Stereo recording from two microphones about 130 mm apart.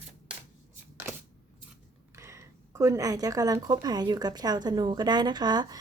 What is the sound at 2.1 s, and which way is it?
Speech, 20° right (ahead or behind).